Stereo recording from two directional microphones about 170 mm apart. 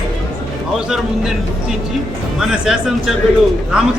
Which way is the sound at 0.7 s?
5° right (ahead or behind).